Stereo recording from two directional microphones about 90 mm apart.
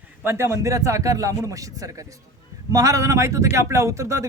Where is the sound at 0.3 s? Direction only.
30° right (ahead or behind).